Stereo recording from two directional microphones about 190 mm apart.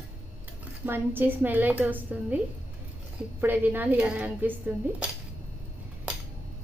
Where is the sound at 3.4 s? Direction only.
10° right (ahead or behind).